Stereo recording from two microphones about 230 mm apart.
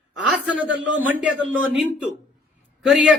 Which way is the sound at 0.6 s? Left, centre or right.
Right.